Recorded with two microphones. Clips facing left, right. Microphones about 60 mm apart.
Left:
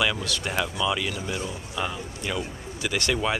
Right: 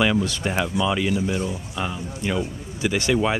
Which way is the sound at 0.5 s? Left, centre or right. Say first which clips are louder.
Right 2 dB; centre.